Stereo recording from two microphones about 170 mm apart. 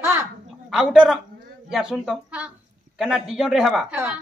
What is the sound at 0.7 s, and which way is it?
Speech, 5° right (ahead or behind).